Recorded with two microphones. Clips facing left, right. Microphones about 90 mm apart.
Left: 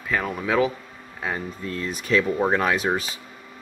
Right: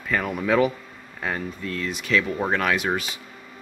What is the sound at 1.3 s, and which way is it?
Speech, 30° left (ahead or behind).